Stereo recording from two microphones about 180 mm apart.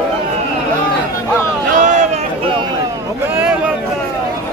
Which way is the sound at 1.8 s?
45° right (ahead or behind).